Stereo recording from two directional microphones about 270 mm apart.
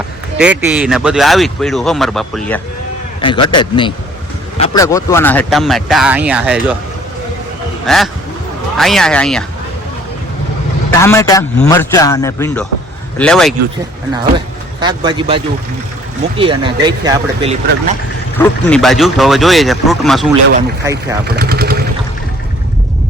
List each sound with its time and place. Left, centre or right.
0.3 s speech: centre
3.2 s a man's voice: centre
4.8 s speech: centre
7.9 s speech: centre
10.9 s a man's voice: centre
14.1 s a man's voice: centre
16.4 s speech: centre
18.3 s speech: centre
20.8 s speech: centre
21.2 s speech: right